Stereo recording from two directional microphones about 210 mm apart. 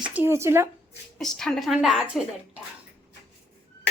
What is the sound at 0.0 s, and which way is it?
Speech, 5° right (ahead or behind).